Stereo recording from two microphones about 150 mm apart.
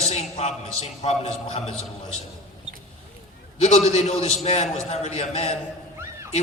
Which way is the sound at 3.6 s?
45° left (ahead or behind).